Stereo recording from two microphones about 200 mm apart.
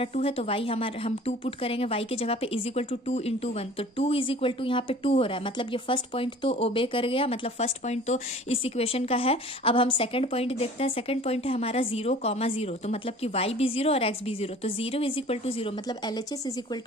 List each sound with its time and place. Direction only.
0.0 s speech: 30° left (ahead or behind)